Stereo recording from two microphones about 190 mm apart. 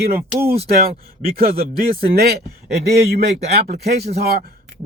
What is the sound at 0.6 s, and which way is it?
Speech, 50° right (ahead or behind).